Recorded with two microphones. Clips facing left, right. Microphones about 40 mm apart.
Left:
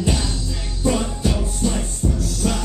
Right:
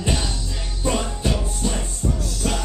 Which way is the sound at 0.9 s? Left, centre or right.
Centre.